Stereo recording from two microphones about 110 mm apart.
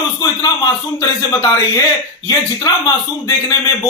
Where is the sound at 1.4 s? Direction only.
35° left (ahead or behind).